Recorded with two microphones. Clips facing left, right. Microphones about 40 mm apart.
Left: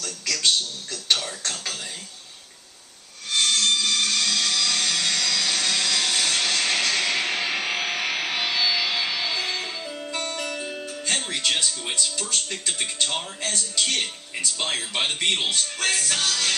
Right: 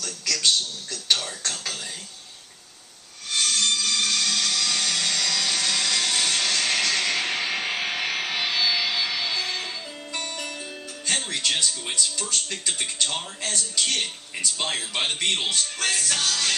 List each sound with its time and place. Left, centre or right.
0.0 s a sound: centre
3.3 s a sound: centre
8.3 s music: centre
8.9 s music: left
9.1 s music: centre
9.6 s speech: centre
15.2 s music: centre